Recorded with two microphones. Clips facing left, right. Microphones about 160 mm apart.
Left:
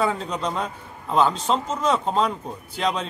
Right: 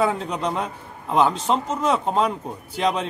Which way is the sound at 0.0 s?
15° right (ahead or behind).